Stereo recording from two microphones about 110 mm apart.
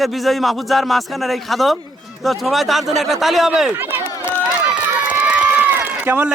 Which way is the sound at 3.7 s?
20° right (ahead or behind).